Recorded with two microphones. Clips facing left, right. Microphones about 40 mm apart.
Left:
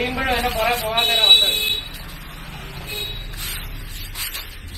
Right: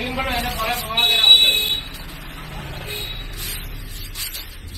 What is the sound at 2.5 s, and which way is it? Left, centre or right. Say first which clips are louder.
Vehicle: even; right.